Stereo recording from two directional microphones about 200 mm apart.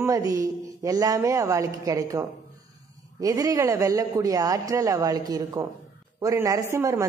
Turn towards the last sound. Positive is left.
turn(degrees=-15)  # may be behind; listen again after turning